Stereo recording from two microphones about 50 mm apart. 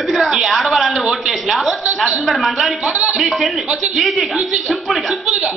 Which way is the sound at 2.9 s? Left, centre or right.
Right.